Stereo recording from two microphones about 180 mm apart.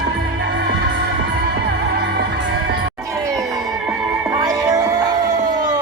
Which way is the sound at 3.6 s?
5° right (ahead or behind).